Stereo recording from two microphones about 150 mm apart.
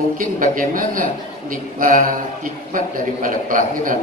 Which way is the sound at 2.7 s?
65° right (ahead or behind).